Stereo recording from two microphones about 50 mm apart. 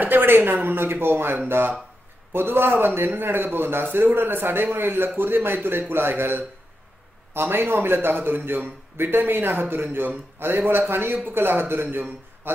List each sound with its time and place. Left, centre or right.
0.0 s a man's voice: right